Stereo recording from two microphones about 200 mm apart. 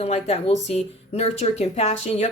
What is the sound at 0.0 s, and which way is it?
Speech, 30° left (ahead or behind).